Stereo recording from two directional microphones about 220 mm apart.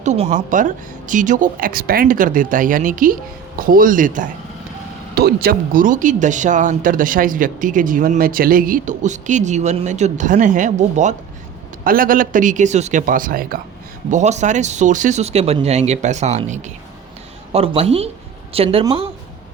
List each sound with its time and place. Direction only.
0.0 s speech: 35° right (ahead or behind)